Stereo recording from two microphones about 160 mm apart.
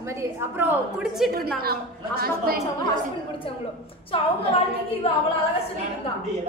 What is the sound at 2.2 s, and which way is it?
Speech, 70° right (ahead or behind).